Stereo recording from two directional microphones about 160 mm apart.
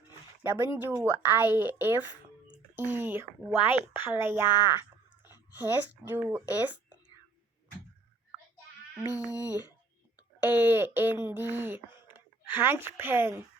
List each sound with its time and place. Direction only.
0.6 s speech: 15° right (ahead or behind)
4.4 s speech: 25° left (ahead or behind)
4.7 s a sound: 10° right (ahead or behind)
5.5 s speech: 10° right (ahead or behind)
9.0 s a sound: 10° right (ahead or behind)
9.3 s speech: 10° right (ahead or behind)